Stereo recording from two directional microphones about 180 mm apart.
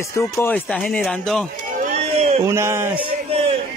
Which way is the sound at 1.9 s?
35° right (ahead or behind).